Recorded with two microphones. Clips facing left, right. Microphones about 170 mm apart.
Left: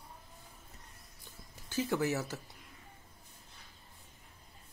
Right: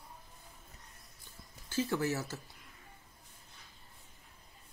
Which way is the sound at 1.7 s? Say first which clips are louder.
Left 1 dB; 15° left (ahead or behind).